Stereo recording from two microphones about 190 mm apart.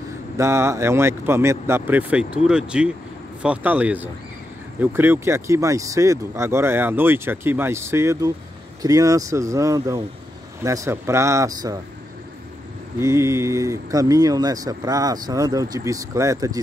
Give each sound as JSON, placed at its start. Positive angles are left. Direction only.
{"t": 0.4, "sound": "speech", "side_deg": -15}
{"t": 13.0, "sound": "speech", "side_deg": -15}